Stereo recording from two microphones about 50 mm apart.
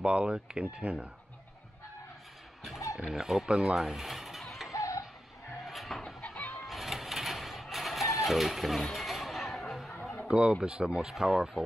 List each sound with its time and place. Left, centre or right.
0.0 s speech: right
3.1 s speech: centre
3.9 s a sound: centre
4.7 s tick-tock: left
5.7 s goat: centre
6.2 s fowl: left
6.6 s a sound: centre
10.2 s speech: right; by 11.4 s centre